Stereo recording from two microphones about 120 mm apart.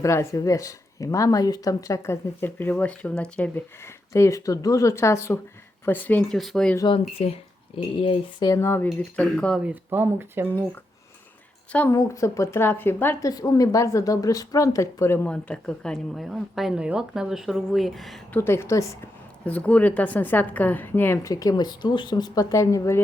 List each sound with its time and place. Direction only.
0.0 s speech: 25° left (ahead or behind)
4.1 s a woman's voice: 25° left (ahead or behind)
6.3 s a woman's voice: centre (ahead or behind)
7.2 s speech: 55° left (ahead or behind)
8.4 s a woman's voice: 20° left (ahead or behind)
9.6 s speech: 15° right (ahead or behind)
11.9 s speech: 25° left (ahead or behind)
13.2 s speech: 30° left (ahead or behind)
15.3 s a woman's voice: 10° left (ahead or behind)
18.3 s speech: 20° left (ahead or behind)
19.5 s a woman's voice: 10° left (ahead or behind)
21.2 s speech: 30° left (ahead or behind)